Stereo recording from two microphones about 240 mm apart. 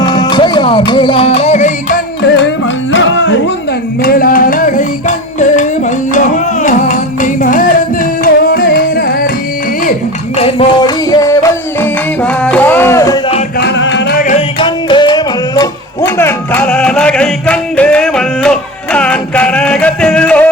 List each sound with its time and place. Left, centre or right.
0.0 s music: centre
2.2 s music: left
4.0 s music: left
10.3 s music: left
13.6 s music: left
14.2 s music: left; by 20.5 s centre